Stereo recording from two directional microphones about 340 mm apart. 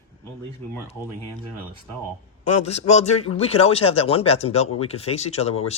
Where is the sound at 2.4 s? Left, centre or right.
Left.